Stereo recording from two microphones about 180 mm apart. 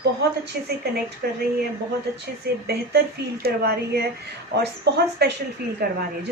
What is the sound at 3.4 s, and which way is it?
A woman's voice, 60° right (ahead or behind).